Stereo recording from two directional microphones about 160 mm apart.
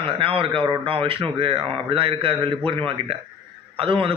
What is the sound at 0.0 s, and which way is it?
Speech, 35° right (ahead or behind).